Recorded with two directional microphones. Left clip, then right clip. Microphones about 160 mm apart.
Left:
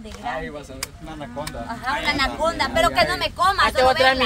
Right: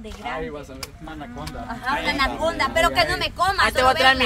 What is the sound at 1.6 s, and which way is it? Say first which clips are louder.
Speech: even; centre (ahead or behind).